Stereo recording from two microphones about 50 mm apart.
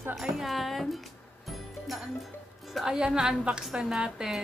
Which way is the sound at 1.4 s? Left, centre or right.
Centre.